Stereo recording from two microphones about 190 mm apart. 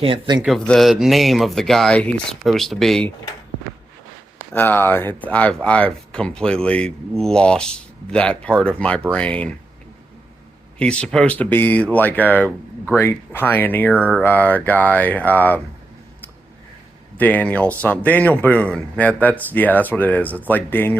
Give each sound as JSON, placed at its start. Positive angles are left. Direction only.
{"t": 0.0, "sound": "speech", "side_deg": -25}
{"t": 0.4, "sound": "speech", "side_deg": 0}
{"t": 4.5, "sound": "speech", "side_deg": 10}
{"t": 10.8, "sound": "speech", "side_deg": 5}
{"t": 17.2, "sound": "speech", "side_deg": 10}